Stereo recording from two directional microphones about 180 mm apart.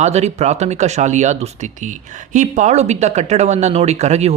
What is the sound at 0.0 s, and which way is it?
Speech, 40° right (ahead or behind).